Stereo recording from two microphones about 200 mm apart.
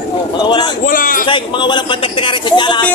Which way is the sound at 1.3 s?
25° left (ahead or behind).